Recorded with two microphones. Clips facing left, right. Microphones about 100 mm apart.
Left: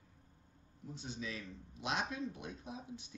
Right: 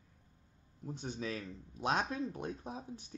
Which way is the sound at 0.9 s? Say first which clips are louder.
Right 4 dB; 45° right (ahead or behind).